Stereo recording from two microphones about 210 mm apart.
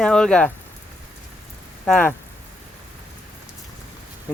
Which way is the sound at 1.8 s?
5° left (ahead or behind).